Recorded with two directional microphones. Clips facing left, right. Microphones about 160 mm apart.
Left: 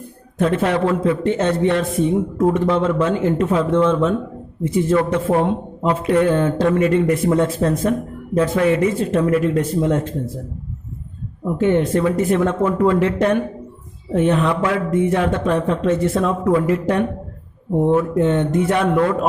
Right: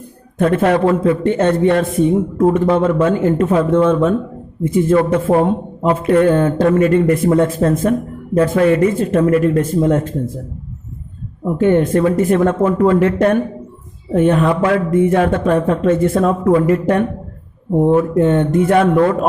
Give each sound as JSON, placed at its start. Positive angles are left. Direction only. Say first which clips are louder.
{"t": 0.3, "sound": "a man's voice", "louder": "right 4 dB", "side_deg": -55}
{"t": 11.5, "sound": "a man's voice", "louder": "right 4 dB", "side_deg": -50}